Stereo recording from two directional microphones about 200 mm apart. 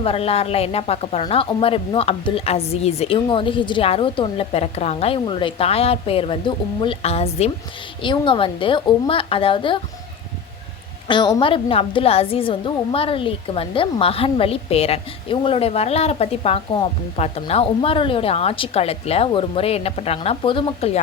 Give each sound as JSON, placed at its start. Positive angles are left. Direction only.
{"t": 0.0, "sound": "a woman's voice", "side_deg": 30}
{"t": 11.1, "sound": "a woman's voice", "side_deg": 20}